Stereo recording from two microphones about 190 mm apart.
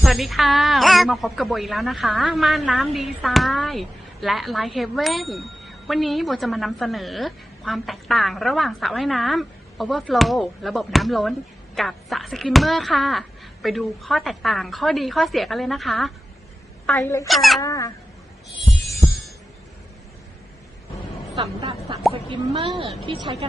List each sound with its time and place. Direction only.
0.0 s a woman's voice: centre (ahead or behind)
16.8 s speech: 10° left (ahead or behind)
17.2 s a woman's voice: centre (ahead or behind)
17.6 s cat: 15° left (ahead or behind)
21.6 s a woman's voice: 25° right (ahead or behind)